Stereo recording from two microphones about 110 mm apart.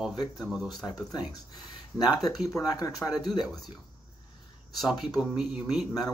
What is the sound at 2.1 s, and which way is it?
Speech, 35° left (ahead or behind).